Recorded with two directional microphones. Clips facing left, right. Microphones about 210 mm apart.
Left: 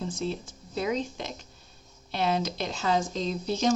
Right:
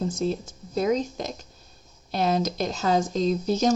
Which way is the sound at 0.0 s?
40° right (ahead or behind).